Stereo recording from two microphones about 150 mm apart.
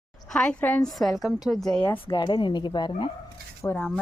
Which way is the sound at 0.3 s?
5° left (ahead or behind).